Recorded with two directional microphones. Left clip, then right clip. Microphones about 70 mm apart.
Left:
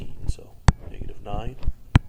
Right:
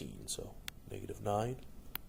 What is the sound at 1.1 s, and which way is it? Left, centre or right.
Speech, right.